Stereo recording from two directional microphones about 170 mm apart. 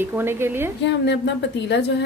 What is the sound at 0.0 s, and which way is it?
Speech, 15° right (ahead or behind).